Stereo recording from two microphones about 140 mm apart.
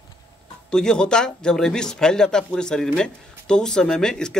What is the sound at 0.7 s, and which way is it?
Speech, 5° left (ahead or behind).